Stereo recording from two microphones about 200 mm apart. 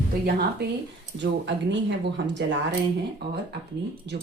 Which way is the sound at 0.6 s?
55° right (ahead or behind).